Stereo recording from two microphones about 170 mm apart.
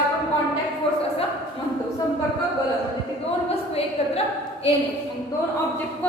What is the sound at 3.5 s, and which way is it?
Speech, 35° left (ahead or behind).